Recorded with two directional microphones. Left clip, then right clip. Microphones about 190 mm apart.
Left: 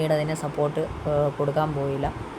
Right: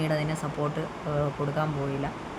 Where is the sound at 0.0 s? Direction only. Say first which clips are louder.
Left 5 dB; 20° left (ahead or behind).